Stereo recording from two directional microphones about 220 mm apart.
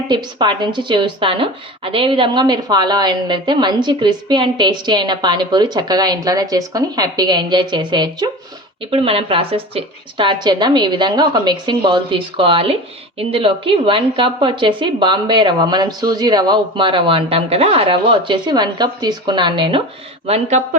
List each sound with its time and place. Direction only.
0.1 s a woman's voice: 20° right (ahead or behind)